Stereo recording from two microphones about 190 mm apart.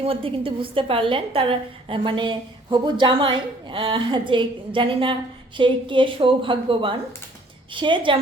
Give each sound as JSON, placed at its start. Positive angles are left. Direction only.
{"t": 0.0, "sound": "a woman's voice", "side_deg": -30}